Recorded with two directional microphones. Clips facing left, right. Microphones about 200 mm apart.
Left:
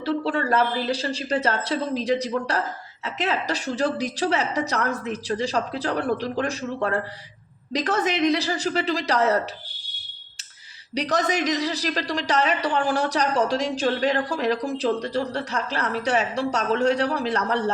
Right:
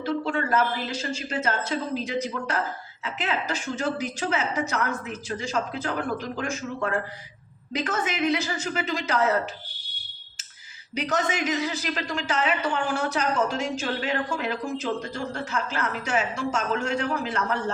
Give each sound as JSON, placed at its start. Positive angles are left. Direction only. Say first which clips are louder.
{"t": 0.0, "sound": "a woman's voice", "louder": "left 2 dB", "side_deg": 35}
{"t": 10.9, "sound": "a woman's voice", "louder": "left 3 dB", "side_deg": 35}